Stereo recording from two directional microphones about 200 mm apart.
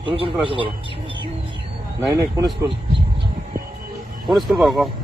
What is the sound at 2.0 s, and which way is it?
Speech, 15° right (ahead or behind).